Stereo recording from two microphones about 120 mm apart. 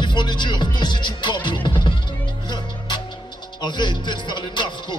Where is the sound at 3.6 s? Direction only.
40° left (ahead or behind).